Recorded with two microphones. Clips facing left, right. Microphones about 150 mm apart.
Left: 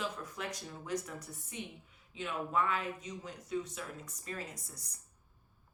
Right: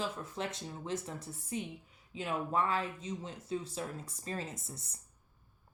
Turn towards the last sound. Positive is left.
turn(degrees=-25)  # may be behind; listen again after turning